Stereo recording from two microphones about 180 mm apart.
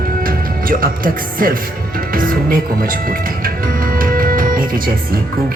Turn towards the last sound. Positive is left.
turn(degrees=-50)  # may be behind; listen again after turning